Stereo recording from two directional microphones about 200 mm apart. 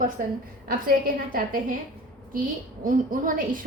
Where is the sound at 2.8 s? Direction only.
45° right (ahead or behind).